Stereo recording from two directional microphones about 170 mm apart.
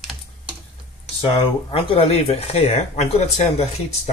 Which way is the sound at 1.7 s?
35° left (ahead or behind).